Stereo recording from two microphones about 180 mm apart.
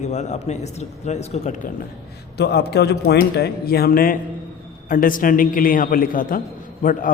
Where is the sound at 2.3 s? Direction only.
65° left (ahead or behind).